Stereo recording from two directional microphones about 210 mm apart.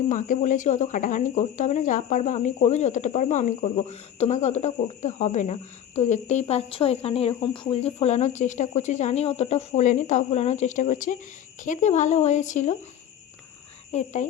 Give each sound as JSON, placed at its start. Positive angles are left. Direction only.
{"t": 0.1, "sound": "speech", "side_deg": 35}
{"t": 13.9, "sound": "speech", "side_deg": 35}